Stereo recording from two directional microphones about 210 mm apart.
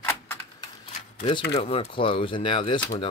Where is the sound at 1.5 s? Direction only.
25° left (ahead or behind).